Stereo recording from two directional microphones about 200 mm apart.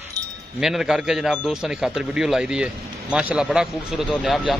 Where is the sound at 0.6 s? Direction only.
Centre (ahead or behind).